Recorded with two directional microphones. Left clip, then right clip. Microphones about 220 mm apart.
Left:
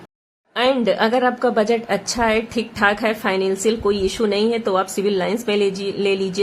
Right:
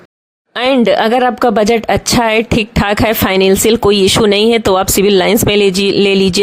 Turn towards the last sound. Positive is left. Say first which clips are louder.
# right 10 dB
turn(degrees=-40)  # may be behind; listen again after turning